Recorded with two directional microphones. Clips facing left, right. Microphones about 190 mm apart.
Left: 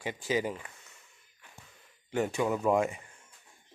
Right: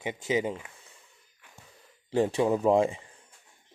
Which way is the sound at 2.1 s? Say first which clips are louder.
Right 5 dB; 30° right (ahead or behind).